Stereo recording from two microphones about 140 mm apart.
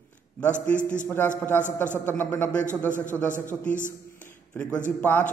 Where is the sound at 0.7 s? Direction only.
65° left (ahead or behind).